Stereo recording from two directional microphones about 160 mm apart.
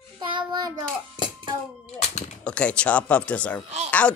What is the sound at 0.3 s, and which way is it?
Child singing, 30° right (ahead or behind).